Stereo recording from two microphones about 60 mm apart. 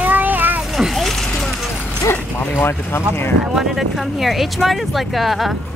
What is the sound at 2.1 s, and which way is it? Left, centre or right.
Speech, left.